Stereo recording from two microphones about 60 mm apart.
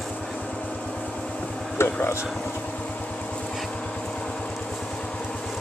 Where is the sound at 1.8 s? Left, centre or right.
Left.